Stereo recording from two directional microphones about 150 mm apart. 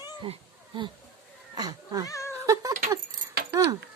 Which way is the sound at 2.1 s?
20° left (ahead or behind).